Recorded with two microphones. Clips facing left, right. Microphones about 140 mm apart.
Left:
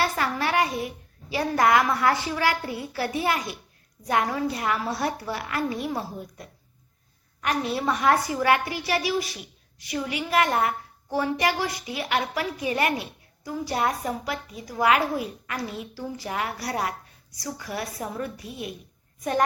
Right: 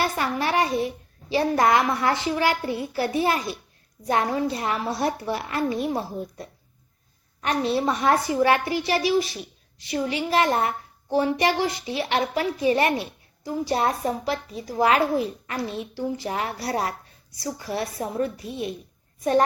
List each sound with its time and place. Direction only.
0.0 s speech: 20° right (ahead or behind)